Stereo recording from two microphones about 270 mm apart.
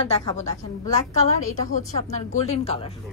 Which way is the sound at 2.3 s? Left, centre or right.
Left.